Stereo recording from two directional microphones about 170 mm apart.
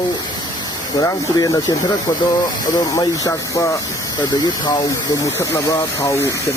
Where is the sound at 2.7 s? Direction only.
20° left (ahead or behind).